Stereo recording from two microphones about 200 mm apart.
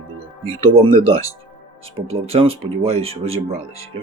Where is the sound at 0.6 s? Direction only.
30° right (ahead or behind).